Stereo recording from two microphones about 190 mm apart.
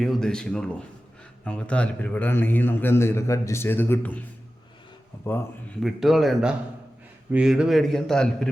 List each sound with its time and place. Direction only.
0.0 s a man's voice: centre (ahead or behind)
5.8 s a man's voice: centre (ahead or behind)